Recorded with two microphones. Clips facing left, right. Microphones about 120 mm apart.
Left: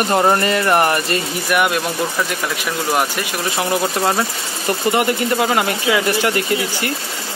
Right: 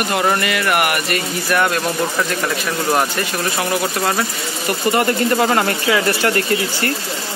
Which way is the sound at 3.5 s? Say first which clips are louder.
Left 3 dB; 20° left (ahead or behind).